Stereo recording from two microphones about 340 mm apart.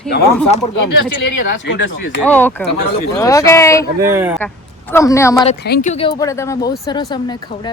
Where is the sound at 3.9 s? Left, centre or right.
Centre.